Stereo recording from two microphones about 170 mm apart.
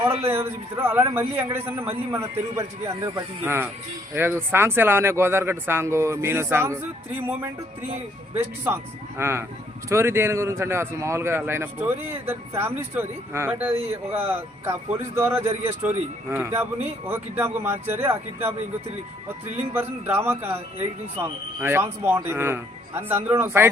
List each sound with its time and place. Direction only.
0.3 s speech: 15° right (ahead or behind)
8.6 s speech: 15° right (ahead or behind)
19.7 s speech: 15° right (ahead or behind)